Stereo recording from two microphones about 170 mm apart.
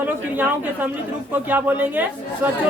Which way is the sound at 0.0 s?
10° right (ahead or behind).